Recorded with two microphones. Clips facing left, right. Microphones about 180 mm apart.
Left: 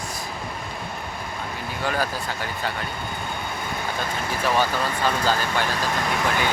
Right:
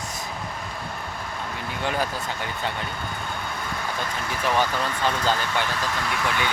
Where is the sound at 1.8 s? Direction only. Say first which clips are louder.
Left 1 dB; 20° right (ahead or behind).